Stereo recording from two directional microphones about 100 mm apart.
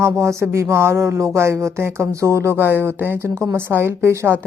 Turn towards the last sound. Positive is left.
turn(degrees=-25)  # may be behind; listen again after turning